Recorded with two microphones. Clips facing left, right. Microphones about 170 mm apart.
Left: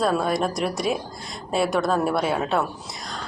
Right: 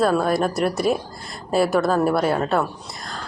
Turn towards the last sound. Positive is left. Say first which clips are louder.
# even
turn(degrees=0)  # may be behind; listen again after turning